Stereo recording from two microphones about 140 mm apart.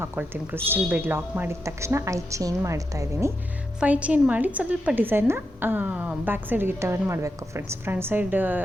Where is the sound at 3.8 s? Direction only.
10° right (ahead or behind).